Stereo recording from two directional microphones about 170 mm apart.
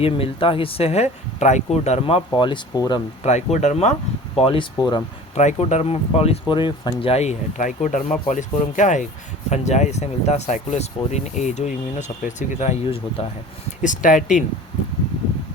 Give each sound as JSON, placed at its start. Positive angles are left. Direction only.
{"t": 0.0, "sound": "speech", "side_deg": 30}
{"t": 3.2, "sound": "speech", "side_deg": 40}
{"t": 4.4, "sound": "speech", "side_deg": 30}
{"t": 5.3, "sound": "speech", "side_deg": 40}
{"t": 13.8, "sound": "speech", "side_deg": 50}